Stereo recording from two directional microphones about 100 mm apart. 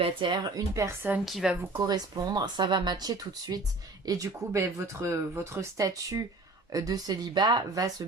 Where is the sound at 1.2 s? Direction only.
Centre (ahead or behind).